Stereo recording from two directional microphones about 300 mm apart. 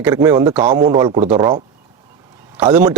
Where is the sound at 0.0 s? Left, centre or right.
Centre.